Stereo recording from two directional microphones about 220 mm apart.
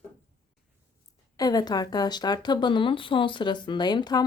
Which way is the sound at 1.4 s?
15° left (ahead or behind).